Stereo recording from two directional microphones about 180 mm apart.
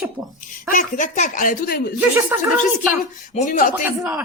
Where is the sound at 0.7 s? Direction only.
45° left (ahead or behind).